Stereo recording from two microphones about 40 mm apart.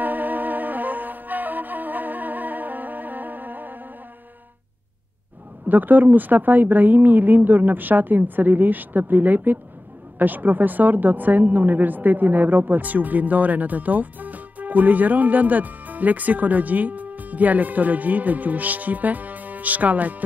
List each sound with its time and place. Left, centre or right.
0.0 s music: right
5.7 s a woman's voice: right